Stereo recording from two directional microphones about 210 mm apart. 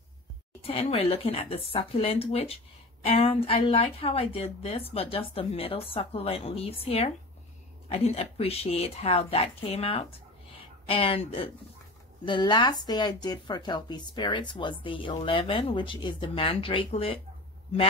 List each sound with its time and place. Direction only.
0.6 s speech: 30° left (ahead or behind)